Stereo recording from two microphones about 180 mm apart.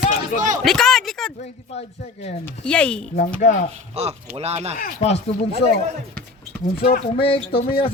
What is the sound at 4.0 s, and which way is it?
Speech, 35° right (ahead or behind).